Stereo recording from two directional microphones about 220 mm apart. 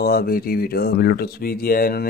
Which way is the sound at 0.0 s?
45° left (ahead or behind).